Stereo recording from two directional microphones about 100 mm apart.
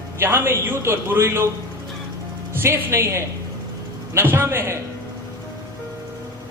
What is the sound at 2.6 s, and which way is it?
A man's voice, 25° right (ahead or behind).